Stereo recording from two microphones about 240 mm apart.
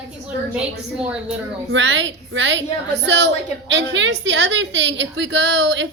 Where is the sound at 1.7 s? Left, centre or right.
Right.